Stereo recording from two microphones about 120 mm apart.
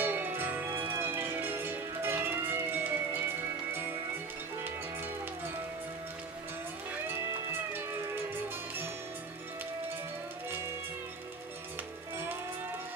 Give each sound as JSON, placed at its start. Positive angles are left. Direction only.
{"t": 0.0, "sound": "music", "side_deg": -15}